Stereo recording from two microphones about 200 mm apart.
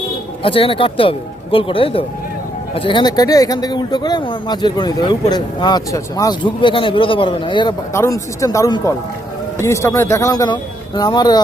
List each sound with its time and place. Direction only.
0.4 s a man's voice: 25° left (ahead or behind)